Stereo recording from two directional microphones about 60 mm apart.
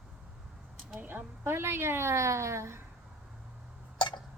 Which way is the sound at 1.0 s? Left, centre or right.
Right.